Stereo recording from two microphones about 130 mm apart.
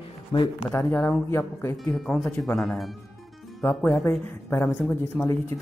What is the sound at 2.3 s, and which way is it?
Speech, 5° left (ahead or behind).